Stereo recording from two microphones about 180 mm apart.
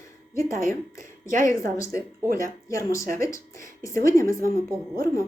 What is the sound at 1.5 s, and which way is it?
Speech, 15° left (ahead or behind).